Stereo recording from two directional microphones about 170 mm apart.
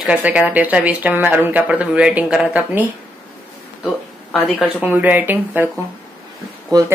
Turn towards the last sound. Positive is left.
turn(degrees=-20)  # may be behind; listen again after turning